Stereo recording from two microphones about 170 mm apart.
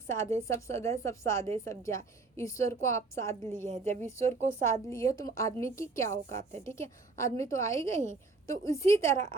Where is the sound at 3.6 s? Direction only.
45° right (ahead or behind).